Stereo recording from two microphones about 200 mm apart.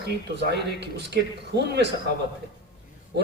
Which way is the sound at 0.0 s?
55° right (ahead or behind).